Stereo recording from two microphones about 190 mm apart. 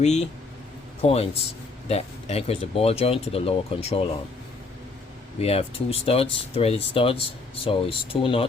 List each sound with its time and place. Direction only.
0.0 s speech: 35° left (ahead or behind)
5.4 s speech: 30° left (ahead or behind)